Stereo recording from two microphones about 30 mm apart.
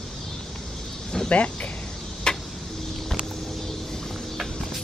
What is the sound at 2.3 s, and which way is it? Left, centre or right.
Tick-tock, left.